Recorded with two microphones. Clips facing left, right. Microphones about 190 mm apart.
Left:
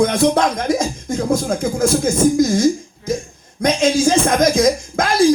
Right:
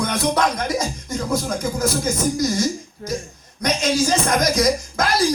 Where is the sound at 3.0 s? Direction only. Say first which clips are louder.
Left 6 dB; 50° right (ahead or behind).